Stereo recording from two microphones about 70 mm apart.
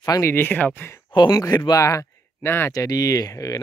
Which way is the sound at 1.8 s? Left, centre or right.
Left.